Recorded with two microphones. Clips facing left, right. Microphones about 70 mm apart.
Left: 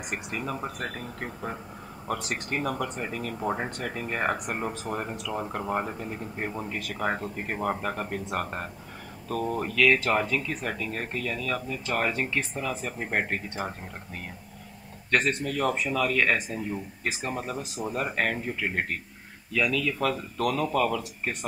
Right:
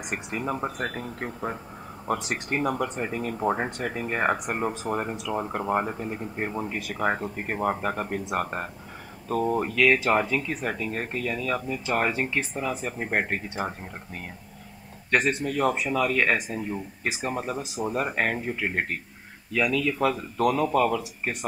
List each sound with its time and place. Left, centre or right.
0.1 s speech: centre
2.0 s speech: right
15.0 s speech: centre